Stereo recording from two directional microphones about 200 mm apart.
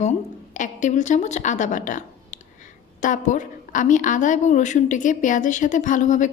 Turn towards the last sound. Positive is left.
turn(degrees=40)  # may be behind; listen again after turning